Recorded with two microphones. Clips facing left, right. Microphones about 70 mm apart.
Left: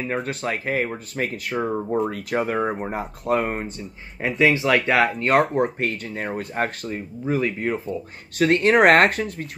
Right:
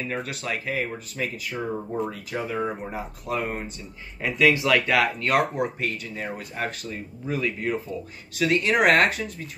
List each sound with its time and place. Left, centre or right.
0.2 s speech: left
5.6 s speech: left
8.4 s speech: left